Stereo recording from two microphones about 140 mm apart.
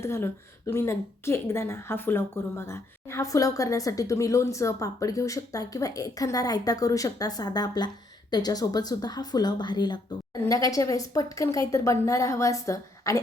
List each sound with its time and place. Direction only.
0.0 s speech: 20° left (ahead or behind)